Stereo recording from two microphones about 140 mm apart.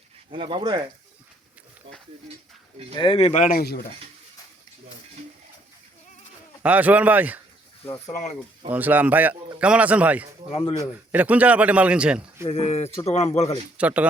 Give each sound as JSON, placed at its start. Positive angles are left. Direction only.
{"t": 0.3, "sound": "speech", "side_deg": -35}
{"t": 2.9, "sound": "speech", "side_deg": 35}
{"t": 3.4, "sound": "speech", "side_deg": 80}
{"t": 6.6, "sound": "a man's voice", "side_deg": -10}
{"t": 7.9, "sound": "speech", "side_deg": 20}
{"t": 8.1, "sound": "speech", "side_deg": 55}
{"t": 8.7, "sound": "a man's voice", "side_deg": -10}
{"t": 10.5, "sound": "speech", "side_deg": 45}
{"t": 11.1, "sound": "a man's voice", "side_deg": -10}
{"t": 12.5, "sound": "speech", "side_deg": 50}
{"t": 13.7, "sound": "a man's voice", "side_deg": -10}